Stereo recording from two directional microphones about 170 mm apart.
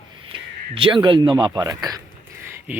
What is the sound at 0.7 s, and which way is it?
Speech, 30° right (ahead or behind).